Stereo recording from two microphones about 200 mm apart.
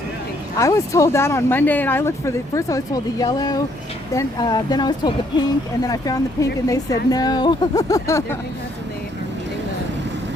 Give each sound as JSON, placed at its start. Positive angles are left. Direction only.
{"t": 0.6, "sound": "speech", "side_deg": 15}